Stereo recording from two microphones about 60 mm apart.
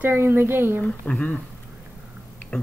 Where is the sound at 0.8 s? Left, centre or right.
Centre.